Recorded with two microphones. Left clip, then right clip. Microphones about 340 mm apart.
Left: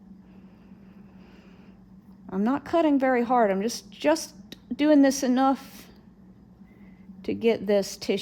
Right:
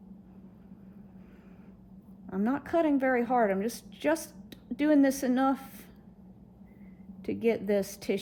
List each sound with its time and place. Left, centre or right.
2.2 s a woman's voice: left
7.2 s a woman's voice: left